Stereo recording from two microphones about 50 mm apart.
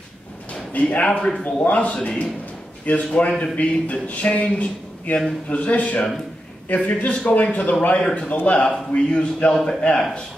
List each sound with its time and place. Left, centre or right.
0.7 s speech: left
1.0 s a man's voice: centre
1.4 s a man's voice: left
9.5 s a man's voice: centre